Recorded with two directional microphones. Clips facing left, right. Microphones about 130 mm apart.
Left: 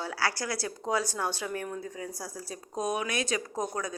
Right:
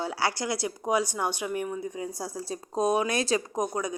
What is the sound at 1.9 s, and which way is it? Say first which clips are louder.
A woman's voice: right 5 dB; 20° right (ahead or behind).